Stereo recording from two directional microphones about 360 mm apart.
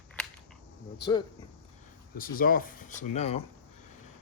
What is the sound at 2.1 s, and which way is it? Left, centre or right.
Speech, left.